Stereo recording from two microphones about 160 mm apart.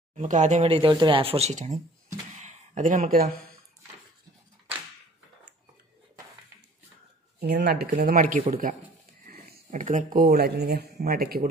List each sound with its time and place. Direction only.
0.1 s speech: 45° right (ahead or behind)
7.3 s speech: 90° right
8.1 s speech: 55° right (ahead or behind)
9.2 s a sound: 55° right (ahead or behind)
10.1 s speech: 75° right (ahead or behind)